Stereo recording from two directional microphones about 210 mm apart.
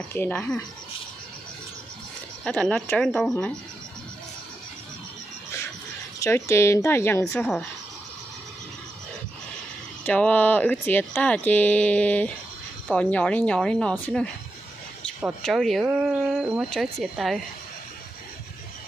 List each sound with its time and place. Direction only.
0.1 s speech: 10° left (ahead or behind)
2.4 s speech: 5° left (ahead or behind)
6.1 s speech: 15° left (ahead or behind)
10.0 s speech: 5° left (ahead or behind)
15.4 s speech: centre (ahead or behind)